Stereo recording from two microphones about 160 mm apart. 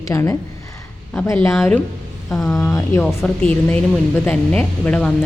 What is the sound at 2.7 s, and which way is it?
Speech, 20° left (ahead or behind).